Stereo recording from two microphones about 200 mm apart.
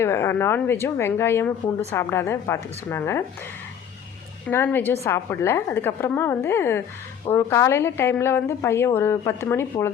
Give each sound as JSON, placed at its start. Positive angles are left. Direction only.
{"t": 0.0, "sound": "a woman's voice", "side_deg": 10}
{"t": 4.4, "sound": "a woman's voice", "side_deg": 10}